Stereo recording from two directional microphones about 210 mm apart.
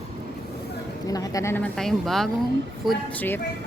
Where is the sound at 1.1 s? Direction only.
15° left (ahead or behind).